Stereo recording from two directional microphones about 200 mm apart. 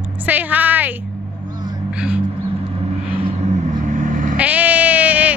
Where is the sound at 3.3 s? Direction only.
35° right (ahead or behind).